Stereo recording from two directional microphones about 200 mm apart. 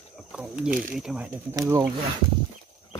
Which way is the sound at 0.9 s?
5° right (ahead or behind).